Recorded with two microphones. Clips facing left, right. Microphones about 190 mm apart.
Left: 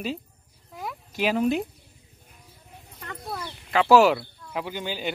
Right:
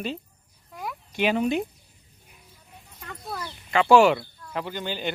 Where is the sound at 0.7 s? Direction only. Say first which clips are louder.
Even; centre (ahead or behind).